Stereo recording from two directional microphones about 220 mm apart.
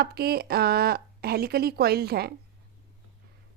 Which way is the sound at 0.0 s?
45° right (ahead or behind).